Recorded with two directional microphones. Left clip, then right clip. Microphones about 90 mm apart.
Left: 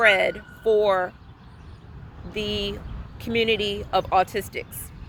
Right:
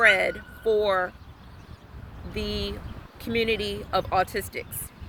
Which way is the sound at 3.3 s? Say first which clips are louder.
Left 3 dB; 50° right (ahead or behind).